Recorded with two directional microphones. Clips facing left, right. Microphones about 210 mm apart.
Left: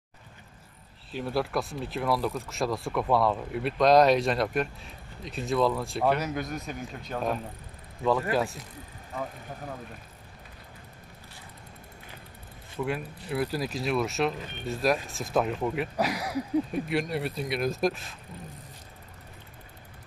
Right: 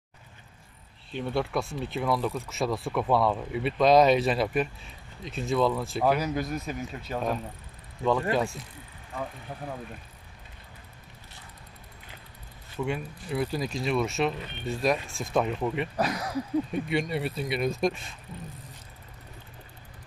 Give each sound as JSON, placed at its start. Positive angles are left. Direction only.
{"t": 1.1, "sound": "speech", "side_deg": 5}
{"t": 12.7, "sound": "speech", "side_deg": 5}